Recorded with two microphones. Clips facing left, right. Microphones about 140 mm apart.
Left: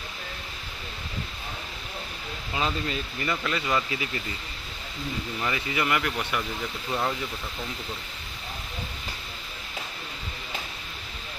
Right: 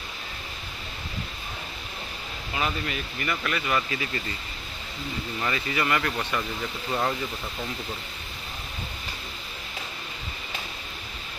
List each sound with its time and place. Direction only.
2.5 s speech: 25° left (ahead or behind)
5.4 s speech: 15° left (ahead or behind)
6.9 s speech: 5° right (ahead or behind)